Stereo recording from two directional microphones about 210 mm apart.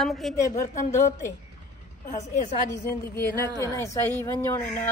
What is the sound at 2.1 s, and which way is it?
Speech, 35° left (ahead or behind).